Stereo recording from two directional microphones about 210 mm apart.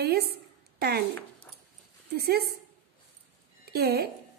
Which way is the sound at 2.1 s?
50° right (ahead or behind).